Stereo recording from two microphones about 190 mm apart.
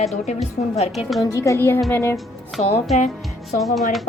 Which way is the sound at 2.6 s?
40° left (ahead or behind).